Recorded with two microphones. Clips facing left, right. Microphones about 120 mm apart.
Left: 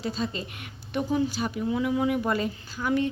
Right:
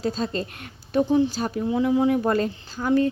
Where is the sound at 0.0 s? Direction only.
40° right (ahead or behind).